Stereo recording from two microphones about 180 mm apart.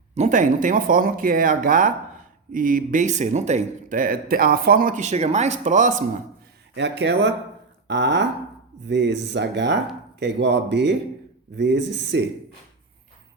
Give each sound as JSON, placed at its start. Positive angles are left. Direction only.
{"t": 0.1, "sound": "a man's voice", "side_deg": -40}
{"t": 6.7, "sound": "speech", "side_deg": -75}
{"t": 7.9, "sound": "a sound", "side_deg": -80}
{"t": 8.9, "sound": "speech", "side_deg": -75}